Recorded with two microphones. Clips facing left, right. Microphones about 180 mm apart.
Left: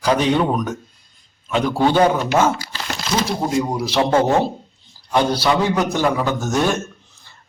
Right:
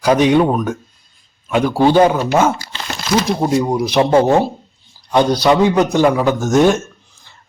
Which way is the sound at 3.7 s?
15° right (ahead or behind).